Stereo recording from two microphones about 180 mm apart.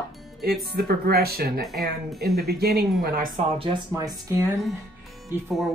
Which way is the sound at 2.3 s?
60° right (ahead or behind).